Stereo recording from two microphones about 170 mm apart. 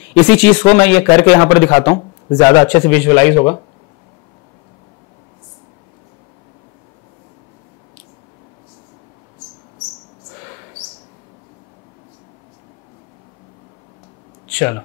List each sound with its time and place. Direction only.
0.1 s a man's voice: 10° left (ahead or behind)
3.3 s speech: 30° left (ahead or behind)
14.5 s a sound: 15° left (ahead or behind)